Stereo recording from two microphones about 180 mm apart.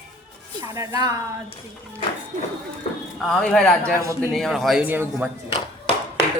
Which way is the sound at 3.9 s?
15° right (ahead or behind).